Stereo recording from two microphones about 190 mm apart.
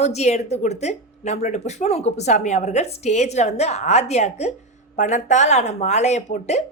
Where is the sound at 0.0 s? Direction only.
35° left (ahead or behind).